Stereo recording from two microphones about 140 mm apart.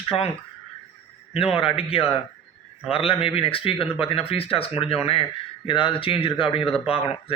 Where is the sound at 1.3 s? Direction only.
45° left (ahead or behind).